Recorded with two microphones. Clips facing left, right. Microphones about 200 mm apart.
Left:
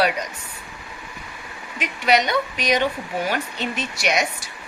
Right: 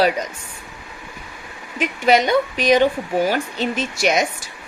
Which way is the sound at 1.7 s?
50° right (ahead or behind).